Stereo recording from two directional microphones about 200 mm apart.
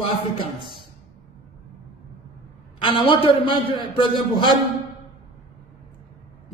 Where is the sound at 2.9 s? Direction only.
25° left (ahead or behind).